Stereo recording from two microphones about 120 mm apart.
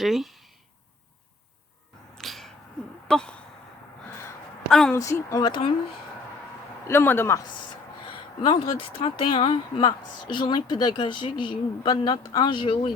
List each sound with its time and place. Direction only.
0.0 s speech: centre (ahead or behind)
2.1 s a sound: centre (ahead or behind)
3.1 s speech: 5° left (ahead or behind)
4.7 s speech: 5° left (ahead or behind)
4.9 s a man's voice: 25° left (ahead or behind)
5.5 s speech: 40° left (ahead or behind)
6.8 s a man's voice: 20° left (ahead or behind)
8.0 s speech: 45° left (ahead or behind)